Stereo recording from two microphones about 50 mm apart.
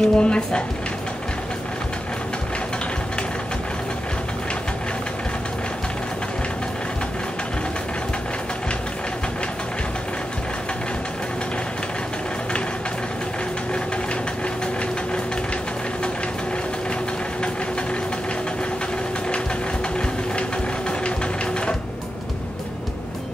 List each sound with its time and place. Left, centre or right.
0.0 s speech: centre